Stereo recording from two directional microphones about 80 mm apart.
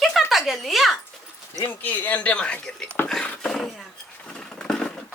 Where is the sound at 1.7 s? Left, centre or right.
Left.